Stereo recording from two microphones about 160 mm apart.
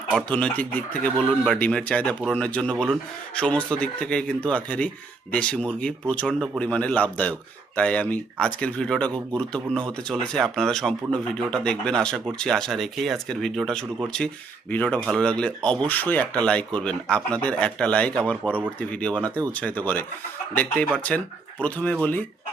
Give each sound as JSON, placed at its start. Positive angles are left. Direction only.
{"t": 0.3, "sound": "speech", "side_deg": 5}